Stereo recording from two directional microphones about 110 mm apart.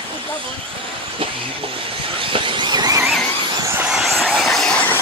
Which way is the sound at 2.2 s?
50° right (ahead or behind).